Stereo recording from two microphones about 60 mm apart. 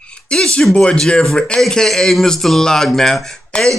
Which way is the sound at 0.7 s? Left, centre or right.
Centre.